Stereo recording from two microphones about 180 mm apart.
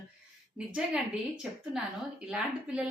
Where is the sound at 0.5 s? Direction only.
5° right (ahead or behind).